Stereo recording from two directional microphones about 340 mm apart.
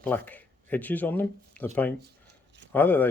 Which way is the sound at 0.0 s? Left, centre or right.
Centre.